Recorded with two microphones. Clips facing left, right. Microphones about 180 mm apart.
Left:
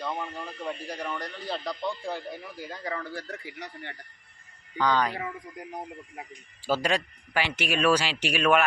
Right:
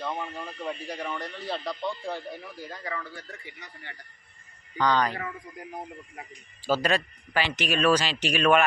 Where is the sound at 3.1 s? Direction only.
90° left.